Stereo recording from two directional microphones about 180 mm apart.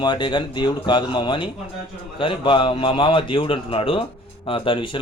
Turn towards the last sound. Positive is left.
turn(degrees=30)  # may be behind; listen again after turning